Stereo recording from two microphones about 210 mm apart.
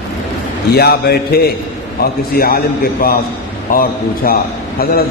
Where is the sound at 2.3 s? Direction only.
45° left (ahead or behind).